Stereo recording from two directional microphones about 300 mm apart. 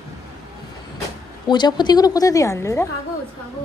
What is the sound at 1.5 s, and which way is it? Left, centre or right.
A woman's voice, centre.